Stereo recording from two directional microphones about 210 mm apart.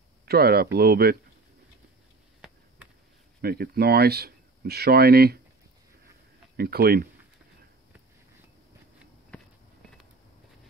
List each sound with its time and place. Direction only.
0.2 s speech: 45° right (ahead or behind)
3.3 s speech: 50° right (ahead or behind)
6.5 s speech: 45° right (ahead or behind)
9.3 s a sound: 5° left (ahead or behind)